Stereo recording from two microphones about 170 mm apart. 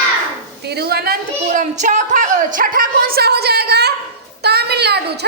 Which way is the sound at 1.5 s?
45° right (ahead or behind).